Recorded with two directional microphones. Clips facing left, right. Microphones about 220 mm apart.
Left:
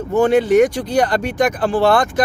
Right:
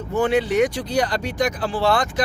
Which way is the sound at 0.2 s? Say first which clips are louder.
Left 6 dB; 45° left (ahead or behind).